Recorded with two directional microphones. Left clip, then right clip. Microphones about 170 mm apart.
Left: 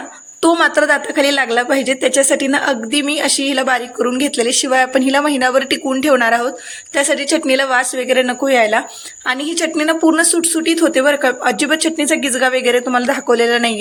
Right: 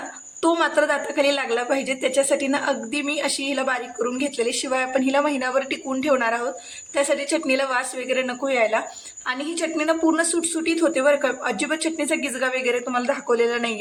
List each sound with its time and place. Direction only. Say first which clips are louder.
0.4 s a woman's voice: left 7 dB; 20° left (ahead or behind)